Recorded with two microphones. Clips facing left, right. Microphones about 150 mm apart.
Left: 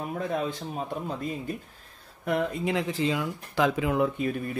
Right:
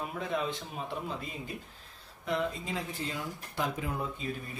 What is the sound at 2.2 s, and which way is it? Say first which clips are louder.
Speech: left 6 dB; 60° left (ahead or behind).